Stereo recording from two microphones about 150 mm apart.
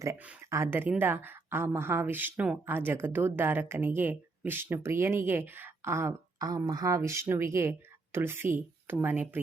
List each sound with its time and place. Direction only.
0.5 s a woman's voice: 15° right (ahead or behind)